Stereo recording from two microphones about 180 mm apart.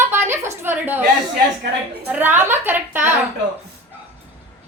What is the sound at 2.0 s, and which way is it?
A woman's voice, 10° right (ahead or behind).